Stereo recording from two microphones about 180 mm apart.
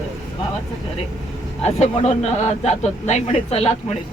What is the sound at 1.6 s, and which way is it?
A man's voice, 35° left (ahead or behind).